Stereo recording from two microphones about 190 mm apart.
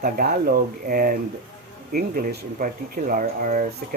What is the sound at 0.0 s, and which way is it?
Speech, 50° right (ahead or behind).